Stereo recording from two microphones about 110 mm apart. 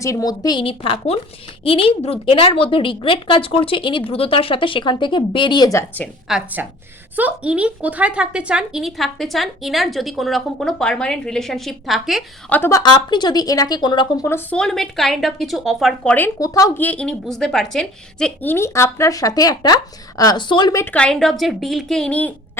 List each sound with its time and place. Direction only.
0.0 s speech: 30° left (ahead or behind)
0.6 s a woman's voice: 60° left (ahead or behind); by 5.7 s 40° left (ahead or behind)
6.3 s speech: 5° right (ahead or behind)
12.5 s speech: 15° left (ahead or behind)
12.8 s speech: 40° left (ahead or behind)
14.5 s speech: 5° left (ahead or behind)
16.4 s speech: 30° left (ahead or behind)
16.7 s speech: 15° left (ahead or behind)
18.4 s speech: 25° left (ahead or behind); by 20.7 s 45° left (ahead or behind)
20.9 s speech: 5° left (ahead or behind)